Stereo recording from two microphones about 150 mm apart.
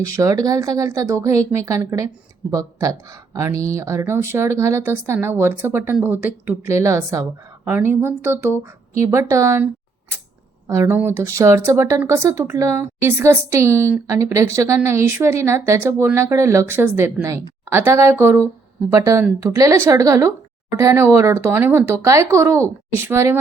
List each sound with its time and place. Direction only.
0.0 s speech: 20° right (ahead or behind)
10.7 s speech: 15° right (ahead or behind)